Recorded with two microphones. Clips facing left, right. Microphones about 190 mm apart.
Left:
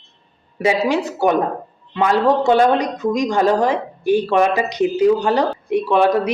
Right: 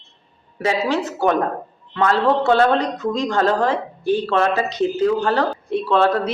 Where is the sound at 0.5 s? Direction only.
15° left (ahead or behind).